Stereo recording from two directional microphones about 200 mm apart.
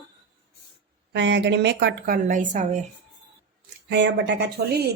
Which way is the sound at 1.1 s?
60° right (ahead or behind).